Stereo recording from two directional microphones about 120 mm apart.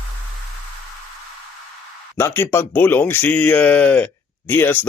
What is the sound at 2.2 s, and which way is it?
Speech, 20° left (ahead or behind).